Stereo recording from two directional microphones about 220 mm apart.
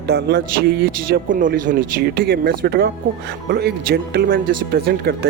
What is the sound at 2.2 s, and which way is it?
Speech, 50° right (ahead or behind).